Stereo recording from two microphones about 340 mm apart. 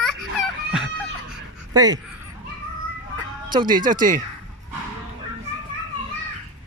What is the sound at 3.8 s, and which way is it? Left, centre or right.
Speech, right.